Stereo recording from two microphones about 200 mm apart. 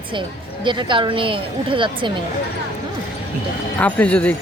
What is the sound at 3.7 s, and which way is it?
Speech, 5° left (ahead or behind).